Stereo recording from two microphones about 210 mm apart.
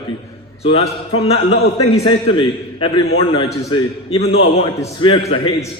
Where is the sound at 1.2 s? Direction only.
30° left (ahead or behind).